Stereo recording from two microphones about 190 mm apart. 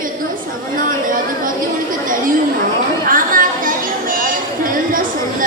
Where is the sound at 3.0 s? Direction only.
45° right (ahead or behind).